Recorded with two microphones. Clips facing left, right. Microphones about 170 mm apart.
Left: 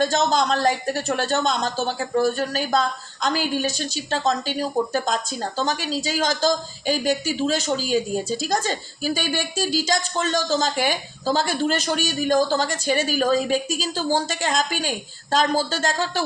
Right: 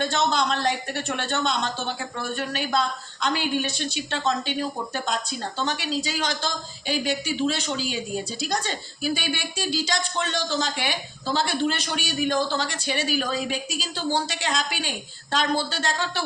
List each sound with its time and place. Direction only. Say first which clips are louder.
0.0 s speech: left 4 dB; 40° left (ahead or behind)